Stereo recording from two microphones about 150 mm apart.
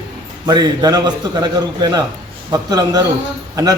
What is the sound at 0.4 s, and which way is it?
A man's voice, 30° right (ahead or behind).